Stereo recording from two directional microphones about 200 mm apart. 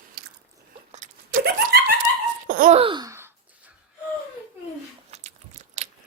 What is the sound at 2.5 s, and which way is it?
Laughter, 45° right (ahead or behind).